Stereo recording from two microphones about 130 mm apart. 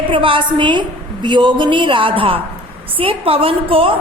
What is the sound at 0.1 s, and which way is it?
A woman's voice, 40° right (ahead or behind).